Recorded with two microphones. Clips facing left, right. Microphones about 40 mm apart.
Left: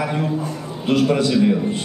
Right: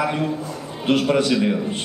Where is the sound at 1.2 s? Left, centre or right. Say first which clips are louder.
Left 2 dB; right.